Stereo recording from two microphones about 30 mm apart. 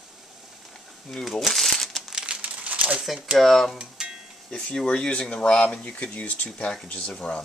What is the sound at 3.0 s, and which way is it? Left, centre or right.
Speech, centre.